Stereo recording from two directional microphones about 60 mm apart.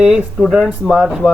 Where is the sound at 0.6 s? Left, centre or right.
Centre.